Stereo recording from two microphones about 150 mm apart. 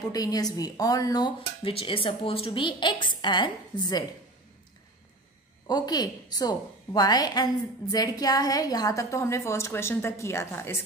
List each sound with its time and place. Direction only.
0.1 s a woman's voice: 25° left (ahead or behind)
1.7 s a woman's voice: 40° left (ahead or behind)
5.7 s a woman's voice: 25° left (ahead or behind)